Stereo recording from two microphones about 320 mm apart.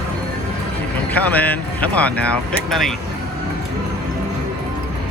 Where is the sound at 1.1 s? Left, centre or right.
Centre.